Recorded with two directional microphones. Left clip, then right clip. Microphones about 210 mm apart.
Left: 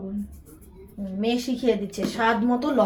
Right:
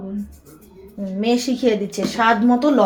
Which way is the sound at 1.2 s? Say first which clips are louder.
Right 6 dB; 30° right (ahead or behind).